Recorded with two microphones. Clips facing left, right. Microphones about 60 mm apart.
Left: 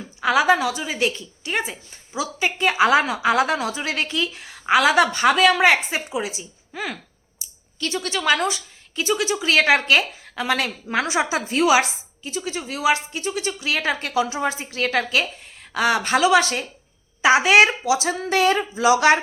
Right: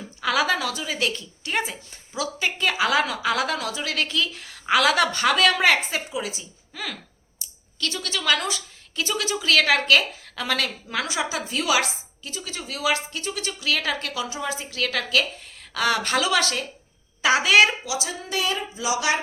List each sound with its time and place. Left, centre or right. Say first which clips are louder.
0.2 s a woman's voice: left 5 dB; centre
7.4 s a sound: left 1 dB; centre
7.8 s a woman's voice: left 4 dB; left
8.4 s a woman's voice: left 4 dB; centre; by 18.2 s left
18.2 s speech: left 8 dB; left